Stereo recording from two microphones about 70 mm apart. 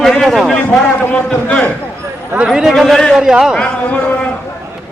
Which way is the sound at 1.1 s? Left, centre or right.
Centre.